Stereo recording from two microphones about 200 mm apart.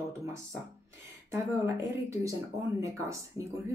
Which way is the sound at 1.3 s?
15° right (ahead or behind).